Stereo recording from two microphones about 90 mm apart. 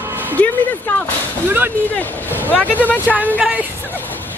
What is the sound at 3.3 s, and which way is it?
Speech, 10° right (ahead or behind).